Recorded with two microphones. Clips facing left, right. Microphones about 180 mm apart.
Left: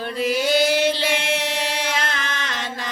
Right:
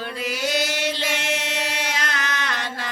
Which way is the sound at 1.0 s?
60° left (ahead or behind).